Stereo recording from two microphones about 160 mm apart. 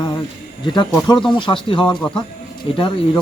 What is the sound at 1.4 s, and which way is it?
Speech, 30° left (ahead or behind).